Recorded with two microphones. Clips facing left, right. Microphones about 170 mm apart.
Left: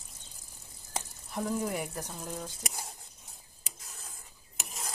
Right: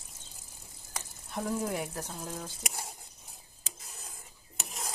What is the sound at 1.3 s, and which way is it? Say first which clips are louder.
Speech: even; centre (ahead or behind).